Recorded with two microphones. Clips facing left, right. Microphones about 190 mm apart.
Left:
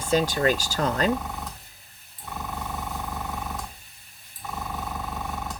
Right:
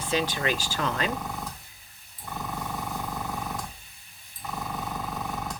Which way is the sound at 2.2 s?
Centre (ahead or behind).